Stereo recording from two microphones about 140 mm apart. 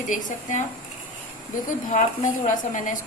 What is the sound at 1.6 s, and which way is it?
A woman's voice, 60° left (ahead or behind).